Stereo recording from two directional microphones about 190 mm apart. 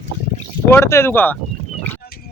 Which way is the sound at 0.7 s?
15° left (ahead or behind).